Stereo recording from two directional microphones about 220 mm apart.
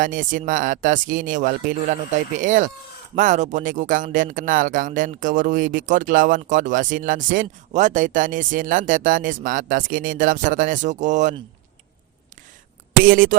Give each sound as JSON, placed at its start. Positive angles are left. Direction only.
{"t": 0.0, "sound": "speech", "side_deg": -35}
{"t": 13.0, "sound": "speech", "side_deg": -40}